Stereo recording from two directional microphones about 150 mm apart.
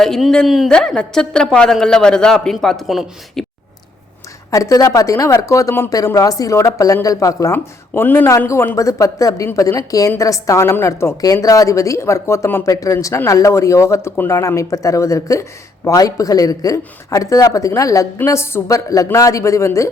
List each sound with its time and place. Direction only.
0.0 s speech: centre (ahead or behind)
4.5 s speech: 20° left (ahead or behind)